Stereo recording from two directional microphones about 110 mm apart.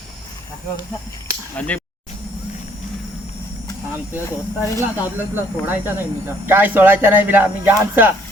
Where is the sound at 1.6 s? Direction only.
15° left (ahead or behind).